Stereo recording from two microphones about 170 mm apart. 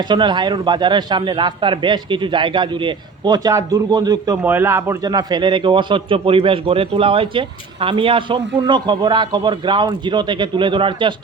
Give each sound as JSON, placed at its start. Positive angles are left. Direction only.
{"t": 0.0, "sound": "a man's voice", "side_deg": -25}
{"t": 4.4, "sound": "a man's voice", "side_deg": -15}